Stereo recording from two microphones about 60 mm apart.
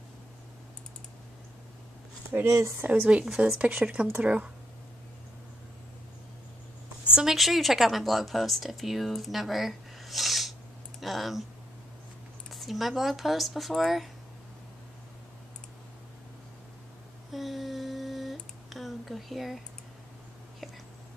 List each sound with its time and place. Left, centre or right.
2.4 s speech: right
2.8 s speech: right
3.1 s speech: centre
7.2 s a woman's voice: centre
12.4 s a woman's voice: centre
17.3 s a sound: centre